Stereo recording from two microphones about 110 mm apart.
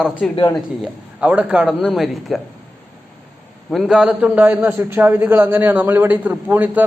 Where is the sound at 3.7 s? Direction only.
5° right (ahead or behind).